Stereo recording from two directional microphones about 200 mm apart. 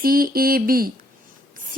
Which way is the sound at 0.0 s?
45° right (ahead or behind).